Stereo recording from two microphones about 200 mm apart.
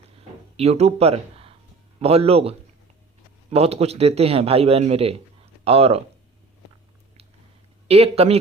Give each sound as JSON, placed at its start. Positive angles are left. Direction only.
{"t": 0.5, "sound": "a man's voice", "side_deg": -30}
{"t": 7.9, "sound": "a man's voice", "side_deg": -30}